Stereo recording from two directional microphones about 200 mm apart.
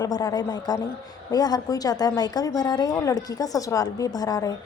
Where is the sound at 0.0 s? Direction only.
20° left (ahead or behind).